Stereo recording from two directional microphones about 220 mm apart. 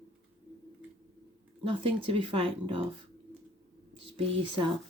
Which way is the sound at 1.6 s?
25° right (ahead or behind).